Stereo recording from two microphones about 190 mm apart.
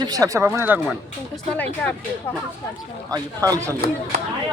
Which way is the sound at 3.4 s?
15° right (ahead or behind).